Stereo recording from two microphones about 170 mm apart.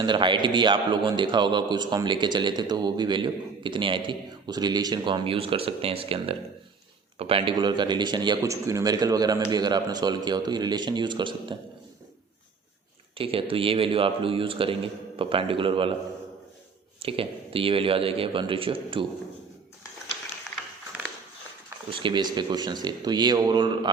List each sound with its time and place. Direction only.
0.0 s a man's voice: 30° right (ahead or behind)
13.1 s a man's voice: 30° right (ahead or behind)
17.0 s a man's voice: 35° right (ahead or behind)
20.5 s a sound: centre (ahead or behind)
21.8 s a man's voice: 30° right (ahead or behind)